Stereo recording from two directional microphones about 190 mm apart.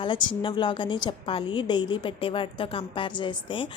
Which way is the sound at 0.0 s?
25° left (ahead or behind).